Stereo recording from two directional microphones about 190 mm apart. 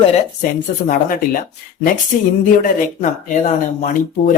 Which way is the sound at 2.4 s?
45° left (ahead or behind).